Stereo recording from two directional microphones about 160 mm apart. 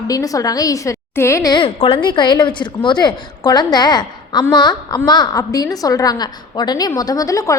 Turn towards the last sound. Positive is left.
turn(degrees=20)  # may be behind; listen again after turning